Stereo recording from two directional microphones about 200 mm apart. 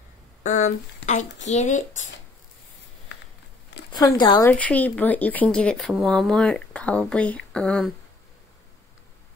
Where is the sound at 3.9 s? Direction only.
20° left (ahead or behind).